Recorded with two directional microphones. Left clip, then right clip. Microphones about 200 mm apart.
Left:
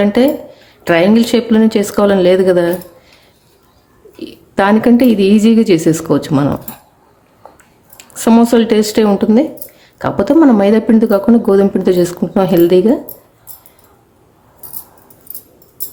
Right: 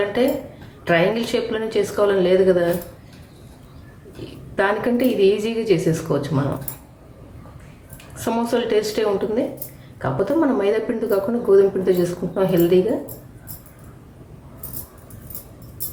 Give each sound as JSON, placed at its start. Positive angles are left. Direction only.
{"t": 0.9, "sound": "speech", "side_deg": 55}
{"t": 4.5, "sound": "a woman's voice", "side_deg": 55}
{"t": 7.9, "sound": "a woman's voice", "side_deg": 55}